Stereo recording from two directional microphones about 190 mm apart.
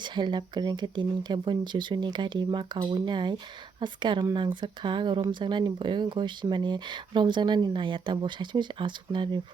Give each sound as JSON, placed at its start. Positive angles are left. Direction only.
{"t": 0.0, "sound": "speech", "side_deg": -25}